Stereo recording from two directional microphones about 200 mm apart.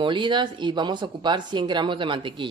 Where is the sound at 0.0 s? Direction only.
25° right (ahead or behind).